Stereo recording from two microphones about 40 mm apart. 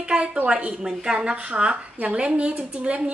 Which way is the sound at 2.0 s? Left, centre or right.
Right.